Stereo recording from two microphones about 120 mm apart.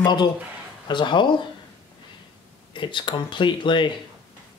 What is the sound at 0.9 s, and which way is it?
Speech, 40° left (ahead or behind).